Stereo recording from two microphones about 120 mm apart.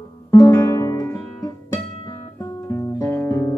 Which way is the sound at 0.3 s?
30° left (ahead or behind).